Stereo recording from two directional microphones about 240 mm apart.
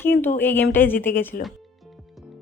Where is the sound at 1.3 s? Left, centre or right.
Left.